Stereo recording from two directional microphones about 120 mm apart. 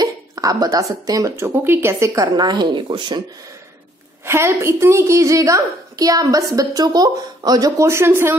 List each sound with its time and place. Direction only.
0.0 s a sound: 30° right (ahead or behind)
1.0 s a woman's voice: 30° right (ahead or behind)
4.2 s a woman's voice: 20° right (ahead or behind)